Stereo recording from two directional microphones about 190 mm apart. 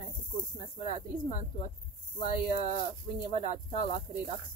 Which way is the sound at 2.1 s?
25° left (ahead or behind).